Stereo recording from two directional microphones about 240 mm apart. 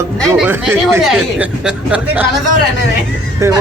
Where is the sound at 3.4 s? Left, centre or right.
Centre.